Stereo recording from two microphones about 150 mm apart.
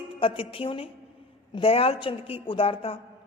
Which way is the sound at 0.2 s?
35° left (ahead or behind).